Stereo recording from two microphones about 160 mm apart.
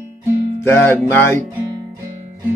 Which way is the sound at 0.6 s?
15° left (ahead or behind).